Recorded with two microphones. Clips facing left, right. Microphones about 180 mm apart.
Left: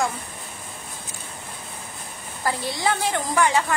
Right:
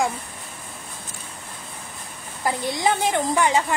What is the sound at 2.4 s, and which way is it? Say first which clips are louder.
A woman's voice: right 2 dB; 20° right (ahead or behind).